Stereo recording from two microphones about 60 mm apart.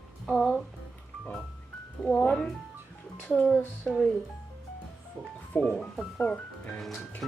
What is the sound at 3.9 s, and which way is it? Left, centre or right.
Speech, left.